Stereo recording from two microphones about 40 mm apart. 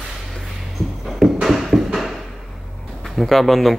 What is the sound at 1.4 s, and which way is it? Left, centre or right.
Music, centre.